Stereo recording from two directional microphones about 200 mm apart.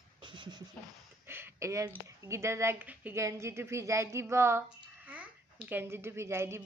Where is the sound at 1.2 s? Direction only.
10° right (ahead or behind).